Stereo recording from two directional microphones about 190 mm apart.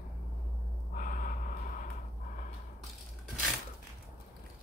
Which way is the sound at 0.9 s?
45° left (ahead or behind).